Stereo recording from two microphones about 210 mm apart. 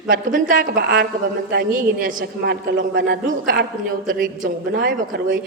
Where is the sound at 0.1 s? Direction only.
40° right (ahead or behind).